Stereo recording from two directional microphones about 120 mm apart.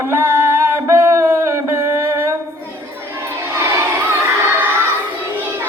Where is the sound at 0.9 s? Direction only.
20° right (ahead or behind).